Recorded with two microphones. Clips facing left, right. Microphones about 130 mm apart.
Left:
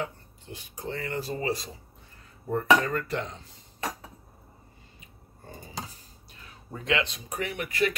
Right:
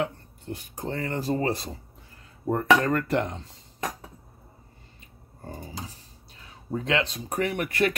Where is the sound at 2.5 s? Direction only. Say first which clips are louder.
Right 2 dB; 70° right (ahead or behind).